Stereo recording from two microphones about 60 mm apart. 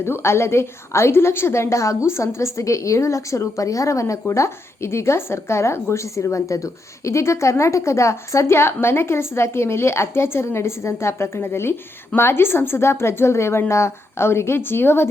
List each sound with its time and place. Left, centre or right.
0.0 s a woman's voice: left